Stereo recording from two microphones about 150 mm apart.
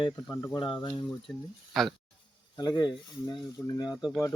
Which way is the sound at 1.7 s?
Centre (ahead or behind).